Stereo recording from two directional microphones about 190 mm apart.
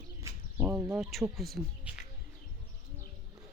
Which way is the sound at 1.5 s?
5° right (ahead or behind).